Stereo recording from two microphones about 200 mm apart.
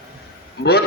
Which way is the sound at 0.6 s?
55° left (ahead or behind).